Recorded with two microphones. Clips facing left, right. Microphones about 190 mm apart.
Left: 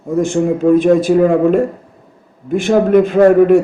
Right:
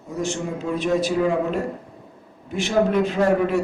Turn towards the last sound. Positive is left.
turn(degrees=55)  # may be behind; listen again after turning